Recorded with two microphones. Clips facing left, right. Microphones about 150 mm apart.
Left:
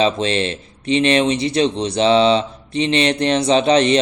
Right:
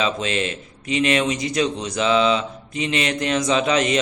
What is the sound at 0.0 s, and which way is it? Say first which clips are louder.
Speech: left 5 dB; 30° left (ahead or behind).